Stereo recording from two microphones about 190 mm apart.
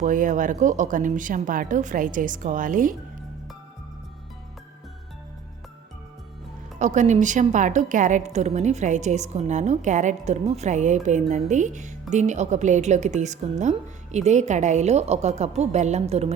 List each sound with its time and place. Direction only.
0.0 s a woman's voice: 45° right (ahead or behind)
6.7 s a woman's voice: 40° right (ahead or behind)